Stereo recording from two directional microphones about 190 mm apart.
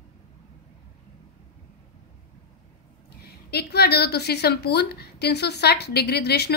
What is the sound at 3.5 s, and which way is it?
A woman's voice, 60° left (ahead or behind).